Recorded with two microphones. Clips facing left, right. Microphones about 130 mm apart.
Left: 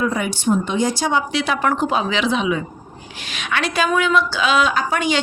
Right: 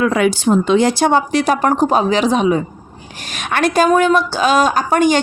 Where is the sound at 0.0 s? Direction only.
85° right.